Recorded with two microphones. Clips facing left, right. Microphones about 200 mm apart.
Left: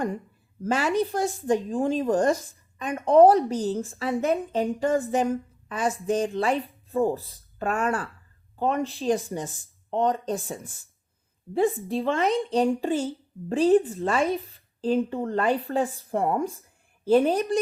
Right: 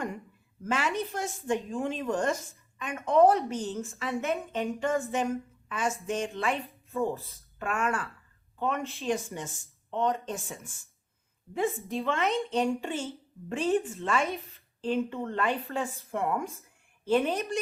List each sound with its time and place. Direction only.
0.6 s a woman's voice: 35° left (ahead or behind)